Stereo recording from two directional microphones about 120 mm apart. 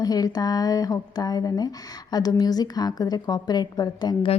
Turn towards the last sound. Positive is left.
turn(degrees=35)  # may be behind; listen again after turning